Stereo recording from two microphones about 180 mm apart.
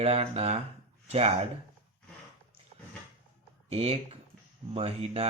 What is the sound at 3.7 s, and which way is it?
Speech, 35° right (ahead or behind).